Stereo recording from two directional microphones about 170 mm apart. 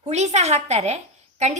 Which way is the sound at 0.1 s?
40° right (ahead or behind).